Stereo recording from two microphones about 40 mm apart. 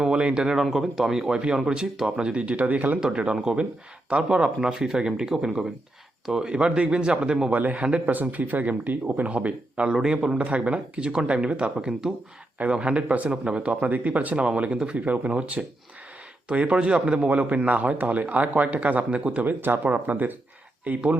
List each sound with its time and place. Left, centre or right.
0.0 s speech: right
0.5 s speech: centre; by 3.0 s right
3.3 s speech: right
4.7 s speech: centre
6.5 s speech: right
7.5 s speech: right
7.8 s speech: right
8.1 s speech: right
9.2 s speech: right
9.9 s speech: centre; by 14.4 s right
14.4 s speech: right